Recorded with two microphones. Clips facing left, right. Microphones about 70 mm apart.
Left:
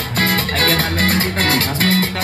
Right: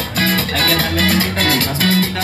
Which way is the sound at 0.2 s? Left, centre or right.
Left.